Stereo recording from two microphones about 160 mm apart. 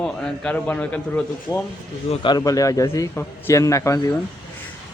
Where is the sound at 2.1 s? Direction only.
30° left (ahead or behind).